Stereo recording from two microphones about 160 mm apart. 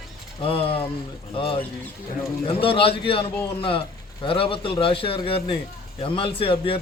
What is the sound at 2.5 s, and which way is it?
A man's voice, 35° left (ahead or behind).